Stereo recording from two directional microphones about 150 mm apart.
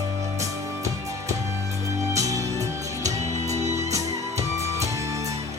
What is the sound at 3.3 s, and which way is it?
Music, 50° right (ahead or behind).